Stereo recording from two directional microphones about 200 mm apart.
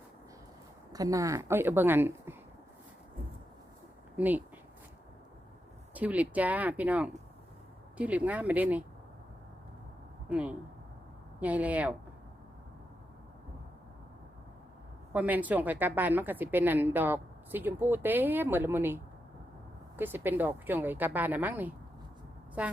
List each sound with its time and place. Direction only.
0.9 s a woman's voice: 15° right (ahead or behind)
4.2 s a woman's voice: 10° right (ahead or behind)
5.9 s a woman's voice: 5° right (ahead or behind)
10.2 s a woman's voice: 5° right (ahead or behind)
15.1 s a woman's voice: 10° right (ahead or behind)
20.0 s a woman's voice: 10° right (ahead or behind)